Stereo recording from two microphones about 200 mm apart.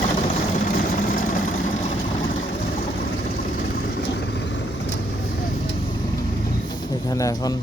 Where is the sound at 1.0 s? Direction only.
45° left (ahead or behind).